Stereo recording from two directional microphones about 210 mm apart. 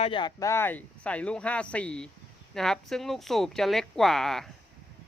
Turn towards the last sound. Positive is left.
turn(degrees=0)  # may be behind; listen again after turning